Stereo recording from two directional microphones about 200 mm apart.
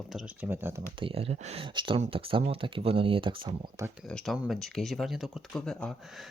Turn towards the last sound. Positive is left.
turn(degrees=5)  # may be behind; listen again after turning